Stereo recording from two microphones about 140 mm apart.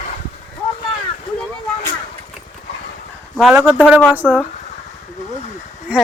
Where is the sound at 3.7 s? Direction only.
10° right (ahead or behind).